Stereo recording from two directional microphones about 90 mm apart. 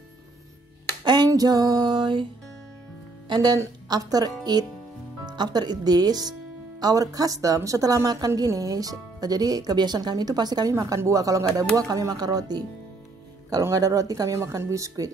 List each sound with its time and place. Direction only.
1.0 s a sound: 50° right (ahead or behind)
3.3 s a woman's voice: 45° right (ahead or behind)
10.7 s speech: 35° right (ahead or behind)